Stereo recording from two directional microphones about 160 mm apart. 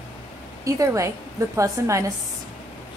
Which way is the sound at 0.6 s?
20° right (ahead or behind).